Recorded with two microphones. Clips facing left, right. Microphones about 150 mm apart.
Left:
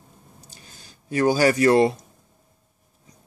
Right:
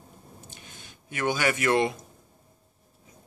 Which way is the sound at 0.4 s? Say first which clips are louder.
Right 1 dB; 35° left (ahead or behind).